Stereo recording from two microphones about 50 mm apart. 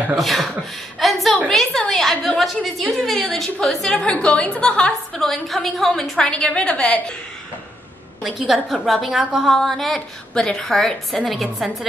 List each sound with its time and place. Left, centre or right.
0.1 s a woman's voice: centre
0.9 s a sound: centre
2.4 s a woman's voice: centre
3.9 s a woman's voice: left
5.2 s a woman's voice: centre
6.1 s a woman's voice: centre
8.2 s a woman's voice: centre